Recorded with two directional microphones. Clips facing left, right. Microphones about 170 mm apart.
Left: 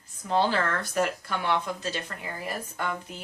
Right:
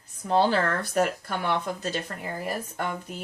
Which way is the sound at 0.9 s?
50° right (ahead or behind).